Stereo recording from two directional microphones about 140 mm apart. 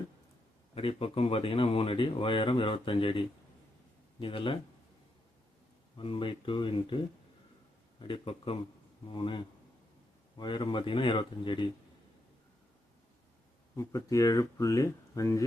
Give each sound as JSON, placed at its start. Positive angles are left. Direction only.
{"t": 0.7, "sound": "speech", "side_deg": 40}
{"t": 6.0, "sound": "speech", "side_deg": 40}
{"t": 13.7, "sound": "speech", "side_deg": 20}